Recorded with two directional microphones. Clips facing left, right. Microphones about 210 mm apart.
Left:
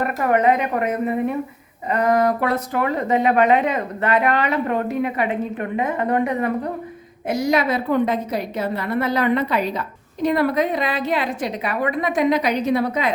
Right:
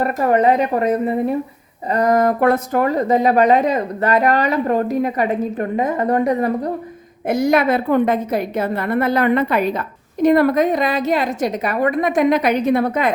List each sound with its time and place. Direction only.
0.0 s speech: 35° right (ahead or behind)
7.3 s a woman's voice: 55° right (ahead or behind)